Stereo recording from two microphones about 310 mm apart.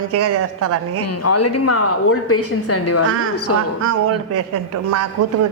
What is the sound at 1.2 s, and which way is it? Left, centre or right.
A woman's voice, left.